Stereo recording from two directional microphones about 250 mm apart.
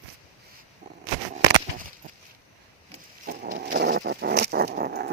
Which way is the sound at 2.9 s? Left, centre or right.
Right.